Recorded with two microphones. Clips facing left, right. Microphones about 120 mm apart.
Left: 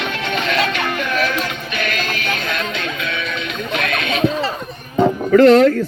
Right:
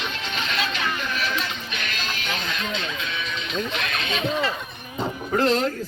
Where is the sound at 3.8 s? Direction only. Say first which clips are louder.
Left 7 dB; 60° left (ahead or behind).